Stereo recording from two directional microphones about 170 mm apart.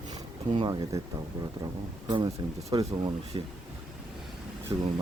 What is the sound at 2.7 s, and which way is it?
Speech, 30° right (ahead or behind).